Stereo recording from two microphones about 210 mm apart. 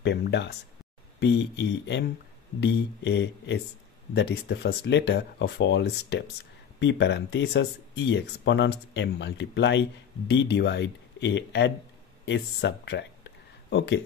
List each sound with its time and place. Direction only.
0.0 s speech: 55° left (ahead or behind)